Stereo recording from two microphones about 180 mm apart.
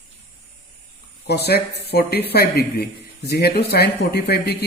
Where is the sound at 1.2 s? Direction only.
65° left (ahead or behind).